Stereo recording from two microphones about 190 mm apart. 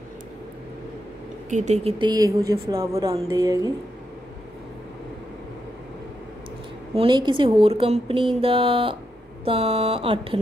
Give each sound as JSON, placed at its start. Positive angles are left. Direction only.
{"t": 1.5, "sound": "speech", "side_deg": -35}
{"t": 7.0, "sound": "speech", "side_deg": -25}